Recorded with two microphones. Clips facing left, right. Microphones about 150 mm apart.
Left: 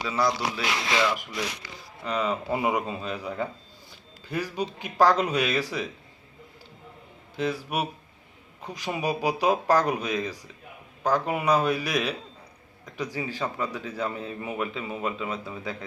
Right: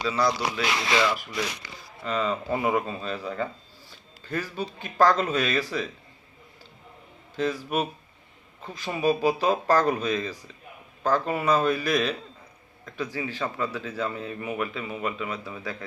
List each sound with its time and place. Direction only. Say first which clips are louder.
0.2 s speech: left 1 dB; 15° left (ahead or behind)
7.3 s a man's voice: right 2 dB; 10° left (ahead or behind)